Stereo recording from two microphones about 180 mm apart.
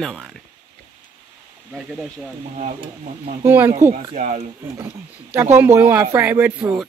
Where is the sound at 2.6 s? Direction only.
40° right (ahead or behind).